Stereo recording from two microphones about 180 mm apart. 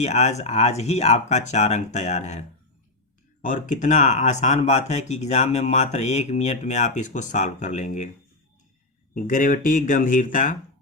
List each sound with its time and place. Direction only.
0.0 s speech: 40° left (ahead or behind)
3.4 s speech: 45° left (ahead or behind)
9.1 s speech: 50° left (ahead or behind)